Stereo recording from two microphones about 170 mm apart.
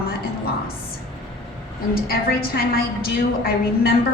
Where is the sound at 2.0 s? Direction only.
60° left (ahead or behind).